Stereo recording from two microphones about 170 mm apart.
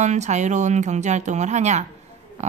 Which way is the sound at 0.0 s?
45° right (ahead or behind).